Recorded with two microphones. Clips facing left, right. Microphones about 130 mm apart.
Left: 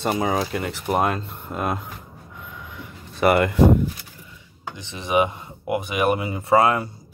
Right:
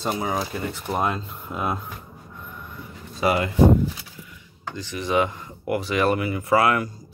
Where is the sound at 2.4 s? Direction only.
90° left; by 3.5 s 60° left (ahead or behind).